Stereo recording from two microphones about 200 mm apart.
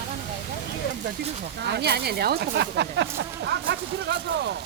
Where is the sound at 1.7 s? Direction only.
55° right (ahead or behind).